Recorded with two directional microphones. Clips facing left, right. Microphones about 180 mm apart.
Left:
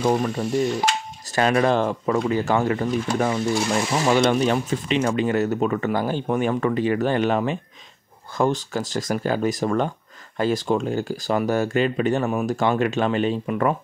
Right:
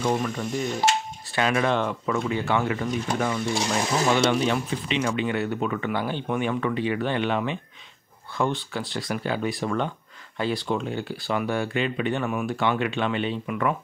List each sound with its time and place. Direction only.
0.0 s speech: 35° left (ahead or behind)